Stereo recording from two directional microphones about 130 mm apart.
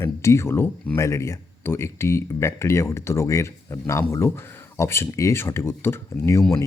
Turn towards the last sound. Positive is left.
turn(degrees=20)  # may be behind; listen again after turning